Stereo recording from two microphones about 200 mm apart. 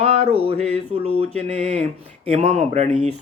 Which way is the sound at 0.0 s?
30° right (ahead or behind).